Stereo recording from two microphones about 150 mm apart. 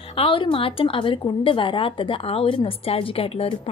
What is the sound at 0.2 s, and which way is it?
A woman's voice, 35° left (ahead or behind).